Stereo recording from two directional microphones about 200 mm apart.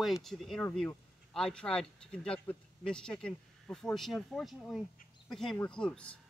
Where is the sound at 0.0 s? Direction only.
Centre (ahead or behind).